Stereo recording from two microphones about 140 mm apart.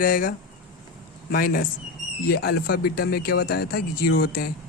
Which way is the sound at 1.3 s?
90° left.